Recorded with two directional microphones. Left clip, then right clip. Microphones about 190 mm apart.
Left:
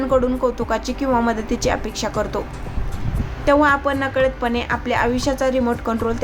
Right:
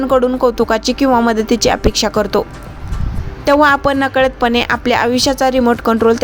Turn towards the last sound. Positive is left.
turn(degrees=-40)  # may be behind; listen again after turning